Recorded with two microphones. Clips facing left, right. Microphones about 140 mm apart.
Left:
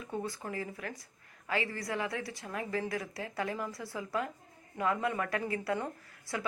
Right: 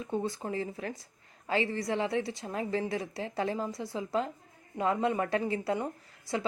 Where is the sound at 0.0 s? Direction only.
25° right (ahead or behind).